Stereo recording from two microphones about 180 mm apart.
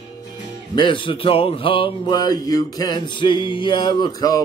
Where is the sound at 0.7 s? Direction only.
25° left (ahead or behind).